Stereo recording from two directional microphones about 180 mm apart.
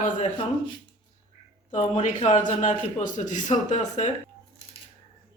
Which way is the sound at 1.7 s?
40° left (ahead or behind).